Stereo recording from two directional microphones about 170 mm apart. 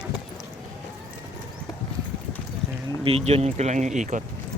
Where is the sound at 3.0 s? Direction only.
35° right (ahead or behind).